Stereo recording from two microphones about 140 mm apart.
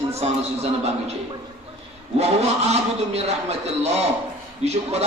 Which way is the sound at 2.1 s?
50° right (ahead or behind).